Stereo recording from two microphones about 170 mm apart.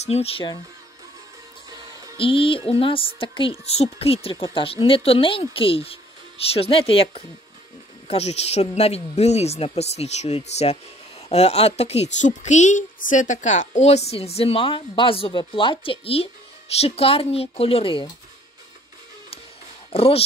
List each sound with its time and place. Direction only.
0.0 s speech: 35° left (ahead or behind)
2.1 s speech: 30° left (ahead or behind)
19.9 s speech: 35° left (ahead or behind)